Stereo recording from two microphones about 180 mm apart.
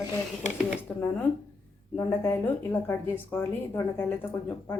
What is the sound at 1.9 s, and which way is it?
A woman's voice, 15° left (ahead or behind).